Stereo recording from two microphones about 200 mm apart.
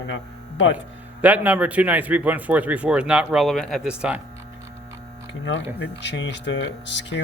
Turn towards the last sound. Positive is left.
turn(degrees=60)  # may be behind; listen again after turning